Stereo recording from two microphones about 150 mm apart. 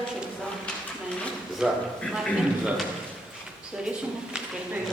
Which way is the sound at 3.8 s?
5° right (ahead or behind).